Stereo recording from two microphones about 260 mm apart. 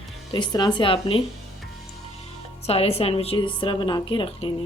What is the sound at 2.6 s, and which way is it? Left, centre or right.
A woman's voice, left.